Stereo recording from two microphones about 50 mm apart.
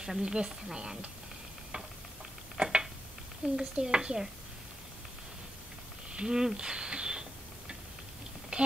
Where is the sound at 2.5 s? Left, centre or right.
Centre.